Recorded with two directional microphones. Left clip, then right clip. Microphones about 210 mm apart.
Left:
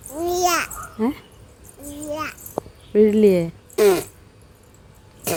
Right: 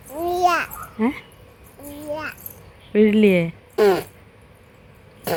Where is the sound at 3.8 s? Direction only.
20° left (ahead or behind).